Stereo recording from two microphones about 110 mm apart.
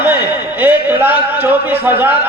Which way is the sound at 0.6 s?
15° right (ahead or behind).